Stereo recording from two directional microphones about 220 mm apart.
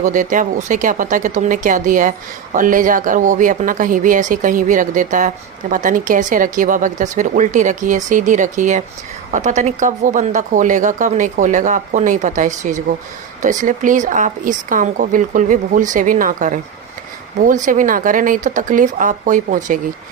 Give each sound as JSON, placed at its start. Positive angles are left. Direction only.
{"t": 0.0, "sound": "speech", "side_deg": -35}